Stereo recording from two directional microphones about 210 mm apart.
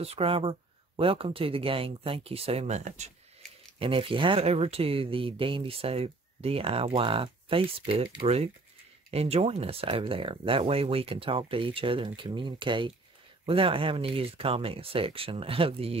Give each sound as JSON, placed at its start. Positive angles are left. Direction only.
{"t": 0.0, "sound": "speech", "side_deg": -25}